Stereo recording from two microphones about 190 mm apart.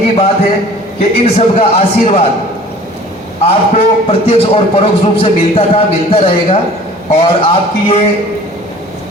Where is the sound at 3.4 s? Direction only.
30° left (ahead or behind).